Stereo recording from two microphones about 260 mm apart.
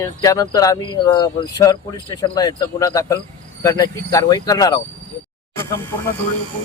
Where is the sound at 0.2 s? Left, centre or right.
Centre.